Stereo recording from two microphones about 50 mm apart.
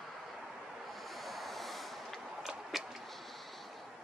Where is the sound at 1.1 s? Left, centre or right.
Centre.